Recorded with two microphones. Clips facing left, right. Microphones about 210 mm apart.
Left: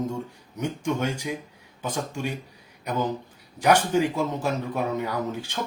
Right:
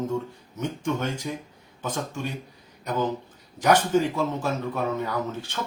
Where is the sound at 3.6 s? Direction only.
10° left (ahead or behind).